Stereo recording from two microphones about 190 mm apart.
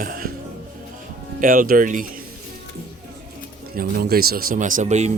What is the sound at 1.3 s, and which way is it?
Speech, 45° right (ahead or behind).